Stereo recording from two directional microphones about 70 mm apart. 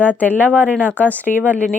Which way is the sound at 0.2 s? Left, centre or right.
Left.